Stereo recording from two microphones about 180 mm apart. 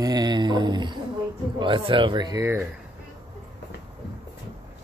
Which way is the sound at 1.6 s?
30° right (ahead or behind).